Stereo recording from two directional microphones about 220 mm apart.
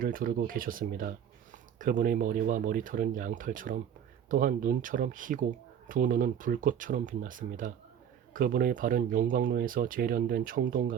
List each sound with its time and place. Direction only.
0.0 s speech: 40° right (ahead or behind)